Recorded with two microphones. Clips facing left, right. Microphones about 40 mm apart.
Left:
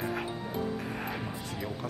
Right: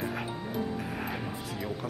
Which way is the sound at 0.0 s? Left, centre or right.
Centre.